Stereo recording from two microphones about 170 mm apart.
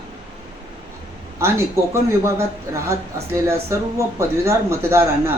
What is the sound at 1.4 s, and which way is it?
Speech, 15° right (ahead or behind).